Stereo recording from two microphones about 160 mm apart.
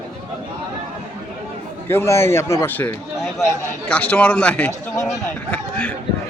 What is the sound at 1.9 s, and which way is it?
A man's voice, 15° left (ahead or behind).